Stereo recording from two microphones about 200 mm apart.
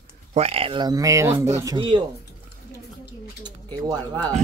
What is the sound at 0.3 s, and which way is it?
Speech, 30° right (ahead or behind).